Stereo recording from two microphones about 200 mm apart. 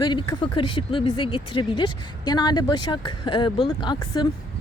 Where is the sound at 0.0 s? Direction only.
20° left (ahead or behind).